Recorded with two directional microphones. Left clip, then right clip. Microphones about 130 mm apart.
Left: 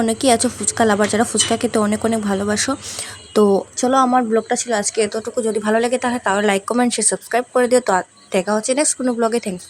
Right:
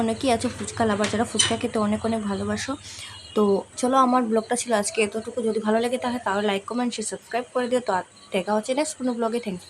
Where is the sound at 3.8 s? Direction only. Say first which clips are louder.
Left 3 dB; 35° left (ahead or behind).